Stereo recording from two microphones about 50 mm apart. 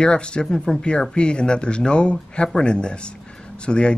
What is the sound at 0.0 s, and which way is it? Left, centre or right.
Speech, centre.